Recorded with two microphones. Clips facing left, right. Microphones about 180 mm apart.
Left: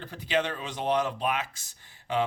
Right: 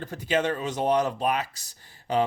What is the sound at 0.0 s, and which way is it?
Speech, 45° right (ahead or behind).